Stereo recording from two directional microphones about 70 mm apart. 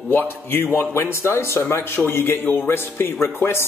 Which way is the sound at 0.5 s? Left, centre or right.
Left.